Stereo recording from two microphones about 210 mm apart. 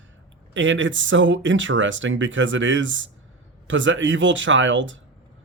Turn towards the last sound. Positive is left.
turn(degrees=-65)  # may be behind; listen again after turning